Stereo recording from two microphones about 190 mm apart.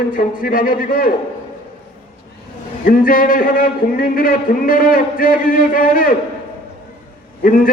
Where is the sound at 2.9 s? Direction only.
45° left (ahead or behind).